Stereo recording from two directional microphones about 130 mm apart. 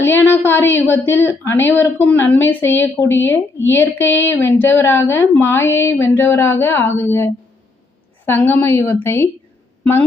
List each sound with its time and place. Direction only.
0.0 s a woman's voice: 15° left (ahead or behind)